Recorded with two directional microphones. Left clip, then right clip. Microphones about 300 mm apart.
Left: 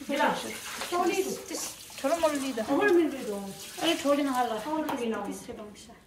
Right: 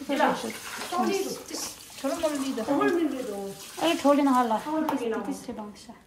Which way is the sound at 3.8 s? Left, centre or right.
Right.